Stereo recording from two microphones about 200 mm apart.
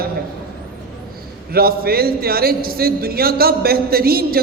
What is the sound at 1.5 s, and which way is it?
A man's voice, 50° right (ahead or behind).